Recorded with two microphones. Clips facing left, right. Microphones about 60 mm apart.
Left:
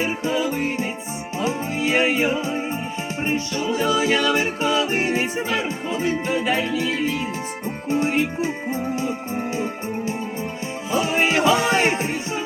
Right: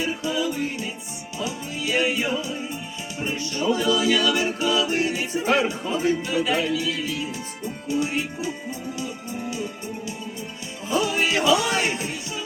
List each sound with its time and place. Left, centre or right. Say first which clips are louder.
0.0 s music: left 3 dB; left
10.9 s music: left 2 dB; left